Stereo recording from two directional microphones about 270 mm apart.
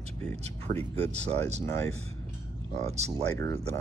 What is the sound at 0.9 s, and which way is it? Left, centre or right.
Speech, right.